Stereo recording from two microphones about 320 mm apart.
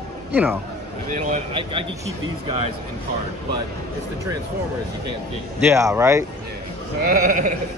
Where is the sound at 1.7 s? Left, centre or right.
Centre.